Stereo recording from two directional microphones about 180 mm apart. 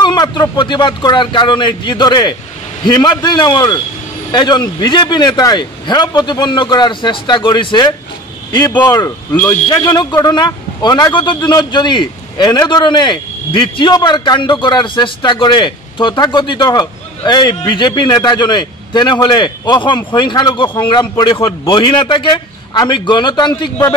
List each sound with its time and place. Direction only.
0.0 s a man's voice: 25° left (ahead or behind)